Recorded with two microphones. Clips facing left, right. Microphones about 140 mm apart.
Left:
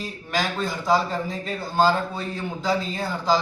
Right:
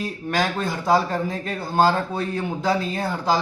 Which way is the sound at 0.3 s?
55° right (ahead or behind).